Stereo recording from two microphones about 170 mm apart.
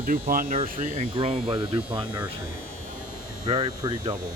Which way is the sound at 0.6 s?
50° right (ahead or behind).